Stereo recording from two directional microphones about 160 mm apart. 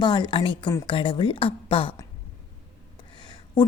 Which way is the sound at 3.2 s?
25° left (ahead or behind).